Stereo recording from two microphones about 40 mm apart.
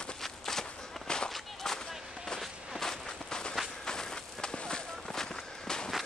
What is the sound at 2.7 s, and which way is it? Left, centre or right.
Walk, centre.